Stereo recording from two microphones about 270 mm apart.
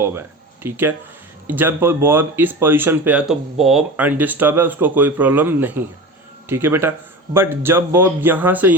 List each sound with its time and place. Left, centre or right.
0.0 s speech: centre